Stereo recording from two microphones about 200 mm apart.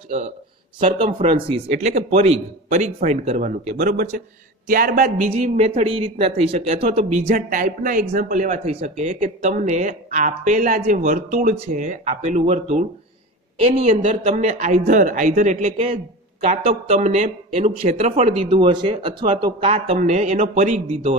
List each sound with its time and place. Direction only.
0.7 s a man's voice: 30° right (ahead or behind)
3.7 s a man's voice: 50° right (ahead or behind); by 21.2 s 30° right (ahead or behind)